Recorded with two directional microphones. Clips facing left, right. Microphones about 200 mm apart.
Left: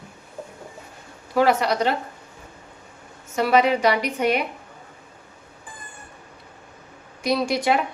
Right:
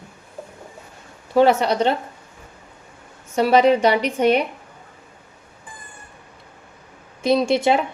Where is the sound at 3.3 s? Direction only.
30° right (ahead or behind).